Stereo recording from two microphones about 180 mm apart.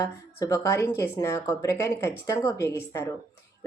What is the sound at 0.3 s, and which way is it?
Speech, 20° left (ahead or behind).